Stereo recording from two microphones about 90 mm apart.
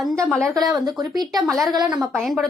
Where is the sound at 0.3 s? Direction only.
5° left (ahead or behind).